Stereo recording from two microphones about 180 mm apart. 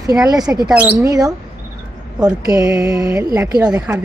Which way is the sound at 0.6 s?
5° right (ahead or behind).